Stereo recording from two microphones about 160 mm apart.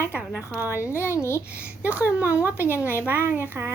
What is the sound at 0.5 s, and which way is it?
Speech, 15° right (ahead or behind).